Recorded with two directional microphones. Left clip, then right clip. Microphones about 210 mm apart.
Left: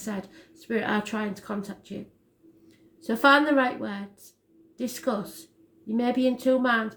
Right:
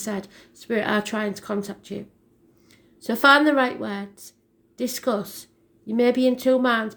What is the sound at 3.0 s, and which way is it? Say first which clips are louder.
A woman's voice: right 4 dB; 45° right (ahead or behind).